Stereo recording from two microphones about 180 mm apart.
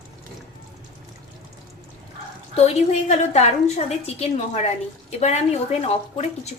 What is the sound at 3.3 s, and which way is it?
Speech, 40° left (ahead or behind).